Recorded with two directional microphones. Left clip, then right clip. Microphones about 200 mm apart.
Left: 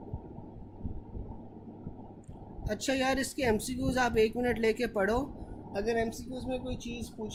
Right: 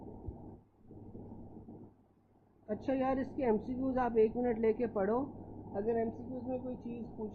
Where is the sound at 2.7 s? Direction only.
20° left (ahead or behind).